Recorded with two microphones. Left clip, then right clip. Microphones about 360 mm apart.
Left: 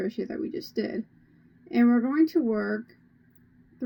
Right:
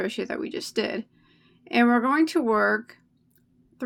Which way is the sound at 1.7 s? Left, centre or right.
Centre.